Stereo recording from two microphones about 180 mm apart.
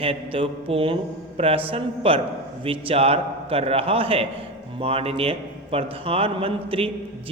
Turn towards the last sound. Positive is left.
turn(degrees=-30)  # may be behind; listen again after turning